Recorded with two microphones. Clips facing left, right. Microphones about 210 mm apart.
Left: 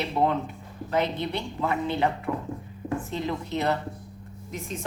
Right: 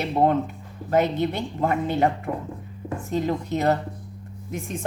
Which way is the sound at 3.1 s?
45° right (ahead or behind).